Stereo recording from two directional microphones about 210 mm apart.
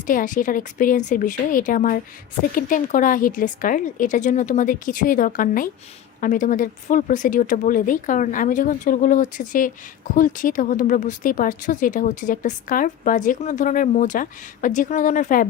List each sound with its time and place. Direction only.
0.1 s speech: 40° left (ahead or behind)